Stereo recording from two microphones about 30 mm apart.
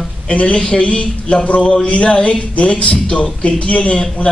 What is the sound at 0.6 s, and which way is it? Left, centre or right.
Speech, left.